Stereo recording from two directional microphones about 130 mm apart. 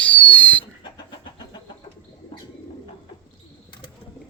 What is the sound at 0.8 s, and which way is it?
Vehicle, 35° left (ahead or behind).